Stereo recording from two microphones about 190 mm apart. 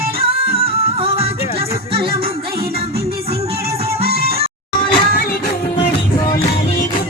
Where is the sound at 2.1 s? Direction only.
50° right (ahead or behind).